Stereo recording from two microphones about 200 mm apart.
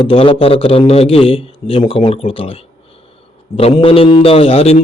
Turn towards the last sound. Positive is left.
turn(degrees=30)  # may be behind; listen again after turning